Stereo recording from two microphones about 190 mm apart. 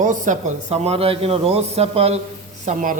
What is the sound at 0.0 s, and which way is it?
A man's voice, 40° right (ahead or behind).